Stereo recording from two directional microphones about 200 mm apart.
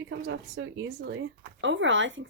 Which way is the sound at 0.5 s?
70° right (ahead or behind).